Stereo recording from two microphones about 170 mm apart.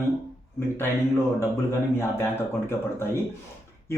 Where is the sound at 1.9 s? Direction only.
15° left (ahead or behind).